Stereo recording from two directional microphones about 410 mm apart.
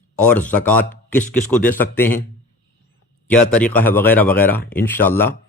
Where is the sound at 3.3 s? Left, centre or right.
Centre.